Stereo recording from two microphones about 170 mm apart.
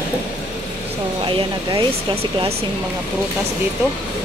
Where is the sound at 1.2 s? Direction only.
25° right (ahead or behind).